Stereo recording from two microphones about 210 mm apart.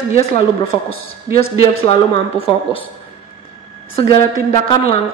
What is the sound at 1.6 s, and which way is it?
A woman's voice, 25° left (ahead or behind).